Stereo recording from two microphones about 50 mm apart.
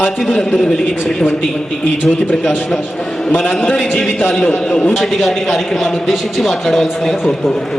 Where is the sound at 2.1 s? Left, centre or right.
Left.